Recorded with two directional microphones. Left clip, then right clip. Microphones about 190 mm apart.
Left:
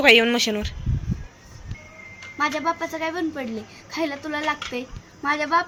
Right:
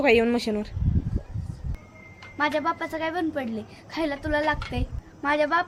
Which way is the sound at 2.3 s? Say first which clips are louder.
Left 1 dB; 20° right (ahead or behind).